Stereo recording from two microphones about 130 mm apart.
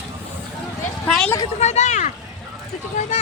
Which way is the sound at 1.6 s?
60° left (ahead or behind).